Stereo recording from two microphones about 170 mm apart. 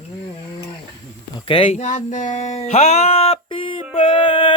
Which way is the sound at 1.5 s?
30° left (ahead or behind).